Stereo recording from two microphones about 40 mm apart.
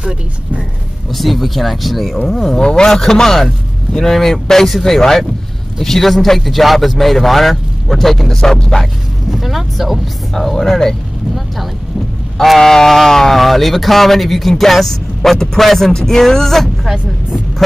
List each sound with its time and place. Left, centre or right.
1.1 s speech: centre
9.3 s speech: centre
10.3 s speech: centre
12.4 s speech: centre